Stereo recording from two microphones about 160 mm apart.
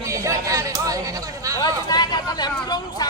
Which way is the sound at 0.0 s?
20° right (ahead or behind).